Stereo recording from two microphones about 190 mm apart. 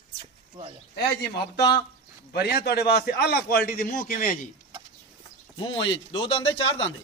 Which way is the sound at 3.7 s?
50° left (ahead or behind).